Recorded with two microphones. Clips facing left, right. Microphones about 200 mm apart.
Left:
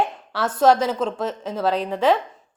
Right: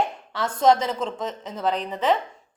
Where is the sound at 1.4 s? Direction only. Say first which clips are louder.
Left 3 dB; 80° left.